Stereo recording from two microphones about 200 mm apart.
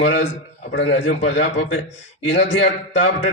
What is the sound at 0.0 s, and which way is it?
A man's voice, 70° left (ahead or behind).